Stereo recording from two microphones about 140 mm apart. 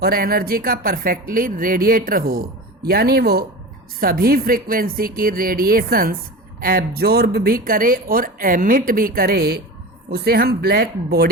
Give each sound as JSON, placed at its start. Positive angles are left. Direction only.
{"t": 0.0, "sound": "speech", "side_deg": -90}